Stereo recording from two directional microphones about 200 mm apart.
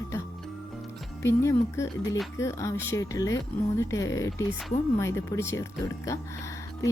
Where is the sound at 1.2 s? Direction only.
15° left (ahead or behind).